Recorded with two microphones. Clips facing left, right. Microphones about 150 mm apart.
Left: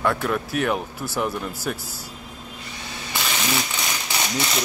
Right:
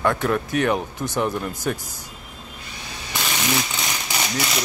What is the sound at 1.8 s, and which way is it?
Speech, 20° right (ahead or behind).